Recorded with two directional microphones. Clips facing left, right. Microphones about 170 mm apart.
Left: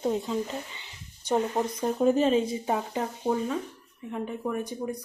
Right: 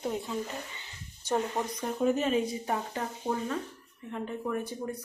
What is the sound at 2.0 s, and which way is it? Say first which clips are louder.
Speech: left 4 dB; 30° left (ahead or behind).